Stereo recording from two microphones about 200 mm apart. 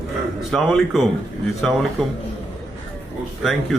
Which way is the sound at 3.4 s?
Centre (ahead or behind).